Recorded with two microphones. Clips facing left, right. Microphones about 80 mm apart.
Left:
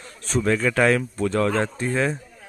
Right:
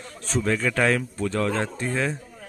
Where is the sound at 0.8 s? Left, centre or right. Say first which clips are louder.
Left 3 dB; left.